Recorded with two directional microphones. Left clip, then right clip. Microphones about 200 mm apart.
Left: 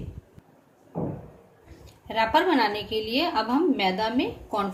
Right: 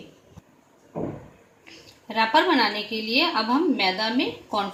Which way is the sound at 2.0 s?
5° right (ahead or behind).